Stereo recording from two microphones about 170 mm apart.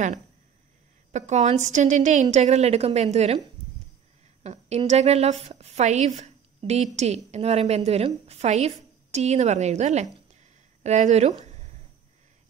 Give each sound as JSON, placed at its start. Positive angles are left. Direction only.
{"t": 1.1, "sound": "a woman's voice", "side_deg": -40}
{"t": 4.4, "sound": "a woman's voice", "side_deg": -40}